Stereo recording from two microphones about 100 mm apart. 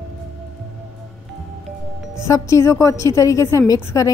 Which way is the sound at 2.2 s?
30° left (ahead or behind).